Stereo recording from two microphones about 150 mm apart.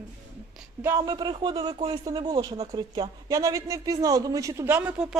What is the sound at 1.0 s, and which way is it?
Speech, 30° right (ahead or behind).